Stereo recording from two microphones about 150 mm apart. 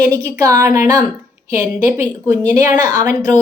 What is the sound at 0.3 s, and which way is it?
A woman's voice, 20° right (ahead or behind).